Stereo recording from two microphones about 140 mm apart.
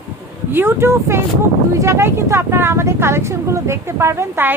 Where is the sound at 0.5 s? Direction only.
15° right (ahead or behind).